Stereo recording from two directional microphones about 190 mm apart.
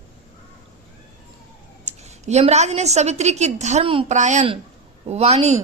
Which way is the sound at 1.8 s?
35° right (ahead or behind).